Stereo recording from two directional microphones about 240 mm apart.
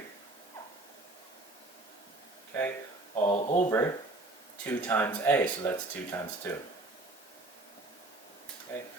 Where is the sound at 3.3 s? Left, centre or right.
Left.